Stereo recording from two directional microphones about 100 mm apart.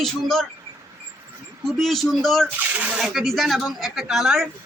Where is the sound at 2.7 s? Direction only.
15° right (ahead or behind).